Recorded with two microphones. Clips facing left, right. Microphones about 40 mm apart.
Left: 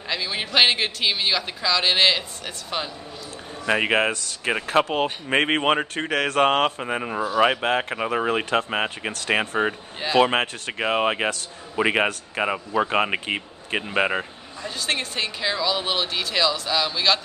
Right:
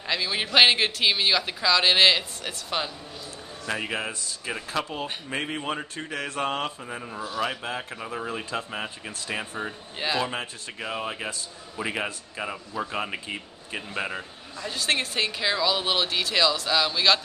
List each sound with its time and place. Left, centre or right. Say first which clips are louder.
0.1 s speech: even; centre
3.6 s a man's voice: left 9 dB; left
4.5 s a man's voice: left 9 dB; left
14.6 s speech: even; centre